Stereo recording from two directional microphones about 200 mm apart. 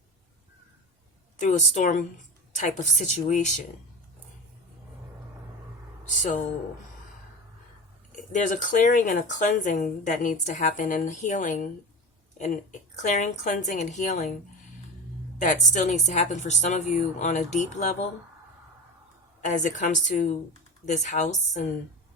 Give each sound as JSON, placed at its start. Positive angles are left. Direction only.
{"t": 1.4, "sound": "speech", "side_deg": 40}
{"t": 6.1, "sound": "speech", "side_deg": 40}
{"t": 8.1, "sound": "speech", "side_deg": 40}
{"t": 13.0, "sound": "speech", "side_deg": 40}
{"t": 15.4, "sound": "speech", "side_deg": 40}
{"t": 19.4, "sound": "speech", "side_deg": 40}